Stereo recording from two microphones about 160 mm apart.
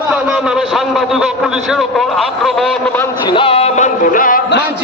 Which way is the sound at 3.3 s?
35° left (ahead or behind).